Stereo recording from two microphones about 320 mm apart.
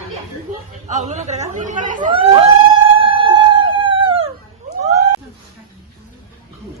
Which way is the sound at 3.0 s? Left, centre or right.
Centre.